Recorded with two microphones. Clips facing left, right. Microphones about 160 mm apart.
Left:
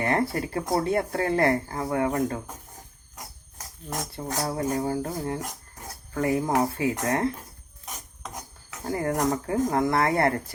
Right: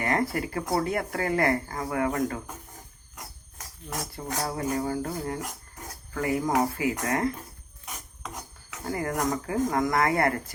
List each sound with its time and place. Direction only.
0.0 s speech: 25° left (ahead or behind)
3.8 s speech: 30° left (ahead or behind)
8.9 s speech: 30° left (ahead or behind)